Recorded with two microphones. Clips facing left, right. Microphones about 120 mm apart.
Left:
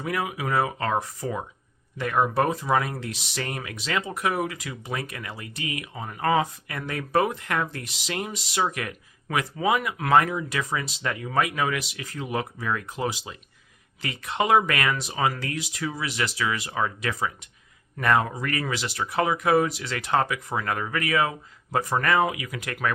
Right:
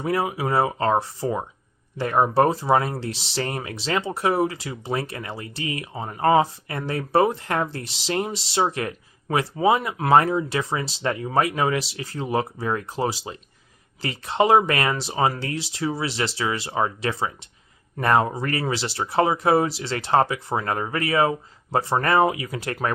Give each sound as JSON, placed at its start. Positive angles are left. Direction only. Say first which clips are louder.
{"t": 0.0, "sound": "speech", "louder": "right 5 dB", "side_deg": -30}